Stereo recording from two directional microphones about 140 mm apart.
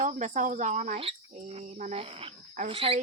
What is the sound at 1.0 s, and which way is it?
Speech, 45° right (ahead or behind).